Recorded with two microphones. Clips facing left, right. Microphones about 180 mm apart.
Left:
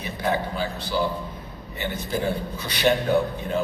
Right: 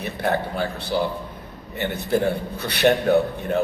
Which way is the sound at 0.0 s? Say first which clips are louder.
Right 2 dB; 65° right (ahead or behind).